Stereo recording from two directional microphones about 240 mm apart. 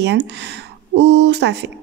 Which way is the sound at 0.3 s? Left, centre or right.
Right.